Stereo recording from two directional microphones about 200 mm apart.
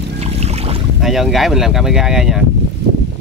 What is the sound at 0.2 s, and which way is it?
Boat, 30° right (ahead or behind).